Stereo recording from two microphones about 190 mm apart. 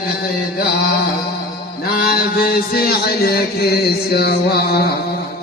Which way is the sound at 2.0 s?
50° left (ahead or behind).